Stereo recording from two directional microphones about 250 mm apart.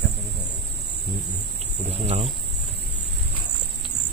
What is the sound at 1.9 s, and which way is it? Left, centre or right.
Speech, right.